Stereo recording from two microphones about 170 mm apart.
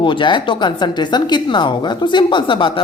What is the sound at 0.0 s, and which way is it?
A woman's voice, 30° left (ahead or behind).